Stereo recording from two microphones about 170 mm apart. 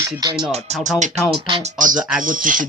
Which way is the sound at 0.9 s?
45° right (ahead or behind).